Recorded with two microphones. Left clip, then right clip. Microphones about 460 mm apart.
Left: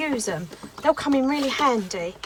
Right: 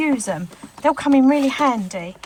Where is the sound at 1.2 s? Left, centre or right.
Centre.